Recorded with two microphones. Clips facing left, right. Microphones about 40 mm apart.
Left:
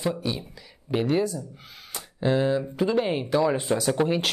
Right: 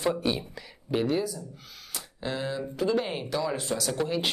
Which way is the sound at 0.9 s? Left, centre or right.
Centre.